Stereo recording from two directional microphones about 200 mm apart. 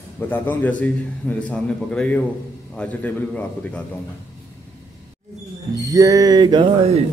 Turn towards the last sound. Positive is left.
turn(degrees=-25)  # may be behind; listen again after turning